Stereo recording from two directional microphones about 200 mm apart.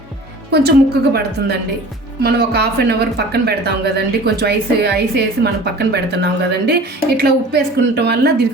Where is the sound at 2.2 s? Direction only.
50° right (ahead or behind).